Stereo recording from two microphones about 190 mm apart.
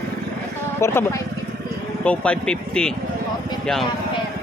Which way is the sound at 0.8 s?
15° left (ahead or behind).